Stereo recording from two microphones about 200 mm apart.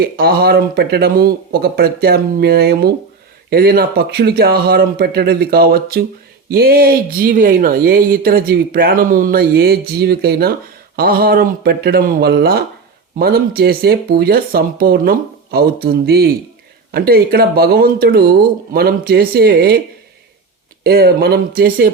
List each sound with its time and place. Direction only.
0.0 s speech: 50° right (ahead or behind)
20.8 s speech: 50° right (ahead or behind)